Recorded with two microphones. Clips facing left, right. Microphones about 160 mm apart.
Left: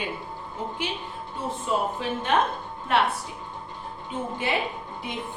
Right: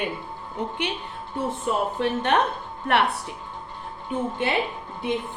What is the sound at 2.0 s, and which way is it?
A woman's voice, 70° right (ahead or behind).